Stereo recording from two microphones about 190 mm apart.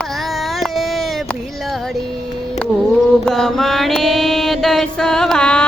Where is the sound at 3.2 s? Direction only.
Centre (ahead or behind).